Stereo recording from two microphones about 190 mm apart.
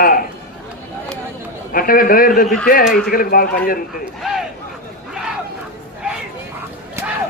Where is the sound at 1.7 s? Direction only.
50° left (ahead or behind).